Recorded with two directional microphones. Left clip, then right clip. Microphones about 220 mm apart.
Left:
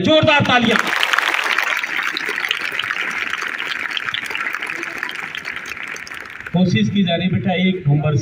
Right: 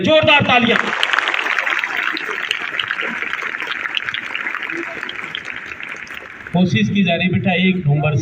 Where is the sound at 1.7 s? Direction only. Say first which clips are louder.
Right 1 dB; 55° left (ahead or behind).